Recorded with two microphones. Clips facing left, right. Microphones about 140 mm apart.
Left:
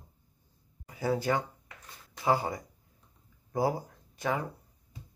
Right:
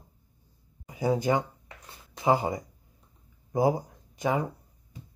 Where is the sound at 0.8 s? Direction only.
20° right (ahead or behind).